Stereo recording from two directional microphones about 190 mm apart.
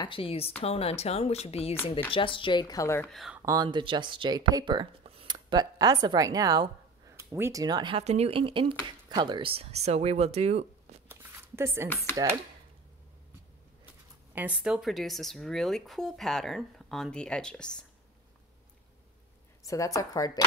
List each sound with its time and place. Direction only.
0.0 s speech: 30° left (ahead or behind)
3.1 s speech: centre (ahead or behind)
3.4 s speech: 20° right (ahead or behind)
11.1 s a sound: 10° right (ahead or behind)
11.9 s speech: 10° left (ahead or behind)
14.3 s speech: 10° right (ahead or behind)
19.6 s speech: 15° left (ahead or behind)